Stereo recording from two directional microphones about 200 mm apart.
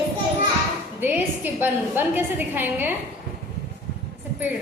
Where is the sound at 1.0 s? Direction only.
10° right (ahead or behind).